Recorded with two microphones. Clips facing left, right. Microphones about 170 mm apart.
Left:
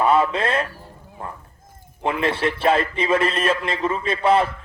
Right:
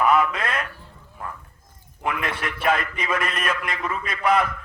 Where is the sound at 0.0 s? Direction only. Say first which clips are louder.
Left 2 dB; 30° left (ahead or behind).